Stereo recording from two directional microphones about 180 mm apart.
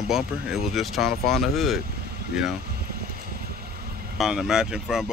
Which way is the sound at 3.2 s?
60° right (ahead or behind).